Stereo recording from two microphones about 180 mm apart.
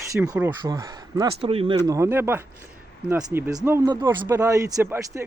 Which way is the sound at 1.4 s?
30° right (ahead or behind).